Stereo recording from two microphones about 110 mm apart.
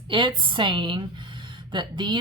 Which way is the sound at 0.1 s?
50° right (ahead or behind).